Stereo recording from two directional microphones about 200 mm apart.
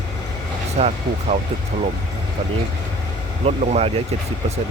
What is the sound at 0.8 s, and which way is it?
Speech, 35° right (ahead or behind).